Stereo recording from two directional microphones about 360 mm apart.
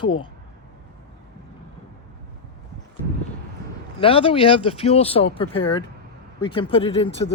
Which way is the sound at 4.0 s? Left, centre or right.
Centre.